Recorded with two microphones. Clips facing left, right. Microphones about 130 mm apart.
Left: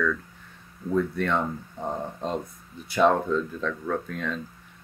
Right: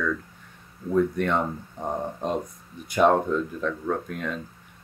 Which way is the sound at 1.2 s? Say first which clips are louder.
Right 1 dB; 15° right (ahead or behind).